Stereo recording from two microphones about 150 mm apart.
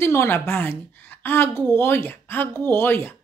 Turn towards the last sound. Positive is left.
turn(degrees=15)  # may be behind; listen again after turning